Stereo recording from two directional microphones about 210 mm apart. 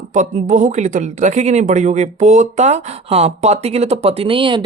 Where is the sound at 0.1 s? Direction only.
35° right (ahead or behind).